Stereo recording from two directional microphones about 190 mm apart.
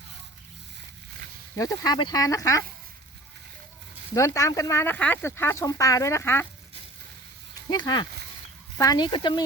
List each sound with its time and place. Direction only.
1.5 s speech: 20° left (ahead or behind)
4.1 s speech: 15° left (ahead or behind)
7.7 s speech: 20° left (ahead or behind)